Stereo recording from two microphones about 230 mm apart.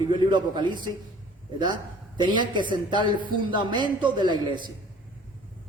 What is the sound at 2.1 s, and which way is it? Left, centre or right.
A man's voice, centre.